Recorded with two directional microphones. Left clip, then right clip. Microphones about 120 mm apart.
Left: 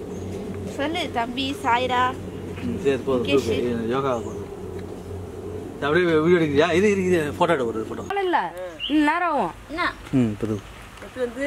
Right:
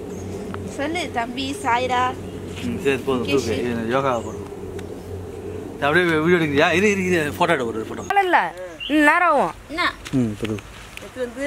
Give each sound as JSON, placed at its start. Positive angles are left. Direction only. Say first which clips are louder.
{"t": 0.7, "sound": "a woman's voice", "louder": "right 1 dB", "side_deg": 10}
{"t": 2.8, "sound": "speech", "louder": "right 1 dB", "side_deg": -25}
{"t": 3.3, "sound": "a woman's voice", "louder": "left 1 dB", "side_deg": 10}
{"t": 3.9, "sound": "speech", "louder": "right 5 dB", "side_deg": -20}
{"t": 5.8, "sound": "a man's voice", "louder": "right 2 dB", "side_deg": -20}
{"t": 8.2, "sound": "speech", "louder": "right 5 dB", "side_deg": -35}
{"t": 9.8, "sound": "speech", "louder": "right 3 dB", "side_deg": -5}